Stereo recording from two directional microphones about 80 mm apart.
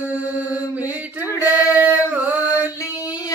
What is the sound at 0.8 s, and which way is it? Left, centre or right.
Male singing, centre.